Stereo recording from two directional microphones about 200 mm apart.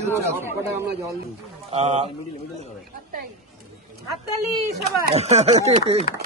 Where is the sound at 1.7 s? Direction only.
35° right (ahead or behind).